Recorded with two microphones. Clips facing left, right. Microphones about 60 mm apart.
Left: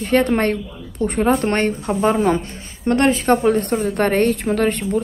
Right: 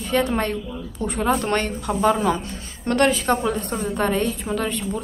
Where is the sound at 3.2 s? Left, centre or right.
Left.